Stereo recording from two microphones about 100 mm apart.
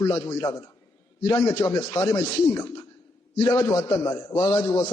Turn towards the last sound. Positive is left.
turn(degrees=35)  # may be behind; listen again after turning